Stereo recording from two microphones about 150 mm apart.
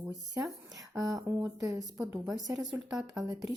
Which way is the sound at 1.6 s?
20° right (ahead or behind).